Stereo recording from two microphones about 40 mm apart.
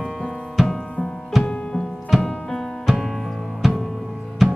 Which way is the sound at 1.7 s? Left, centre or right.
Centre.